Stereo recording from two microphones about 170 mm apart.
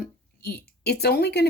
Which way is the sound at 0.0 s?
70° left (ahead or behind).